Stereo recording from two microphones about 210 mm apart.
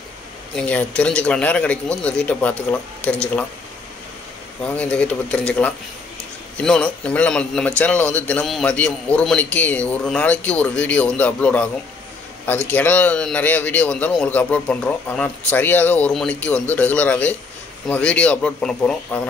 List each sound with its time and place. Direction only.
0.6 s a man's voice: 5° left (ahead or behind)
4.6 s a man's voice: 5° left (ahead or behind)